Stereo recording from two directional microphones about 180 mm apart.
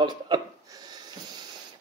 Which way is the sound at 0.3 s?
20° right (ahead or behind).